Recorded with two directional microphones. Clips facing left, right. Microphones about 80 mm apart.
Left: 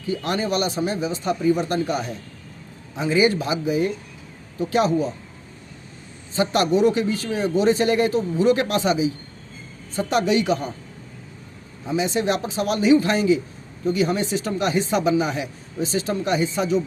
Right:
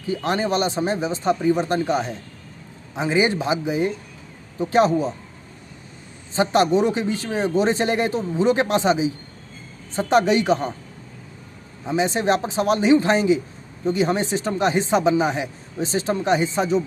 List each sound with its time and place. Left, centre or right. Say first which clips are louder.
0.1 s a man's voice: right 2 dB; right
6.3 s a man's voice: right 2 dB; right
11.9 s speech: right 2 dB; right